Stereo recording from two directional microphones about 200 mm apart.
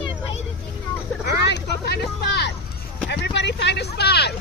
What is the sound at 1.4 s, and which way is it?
Speech, 60° left (ahead or behind).